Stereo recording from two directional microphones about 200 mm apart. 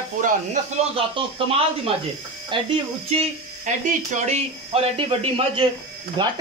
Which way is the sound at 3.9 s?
35° right (ahead or behind).